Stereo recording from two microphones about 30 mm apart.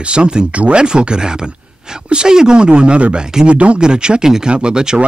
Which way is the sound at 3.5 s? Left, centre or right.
Right.